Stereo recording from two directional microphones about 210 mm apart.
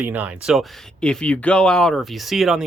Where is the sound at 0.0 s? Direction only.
10° right (ahead or behind).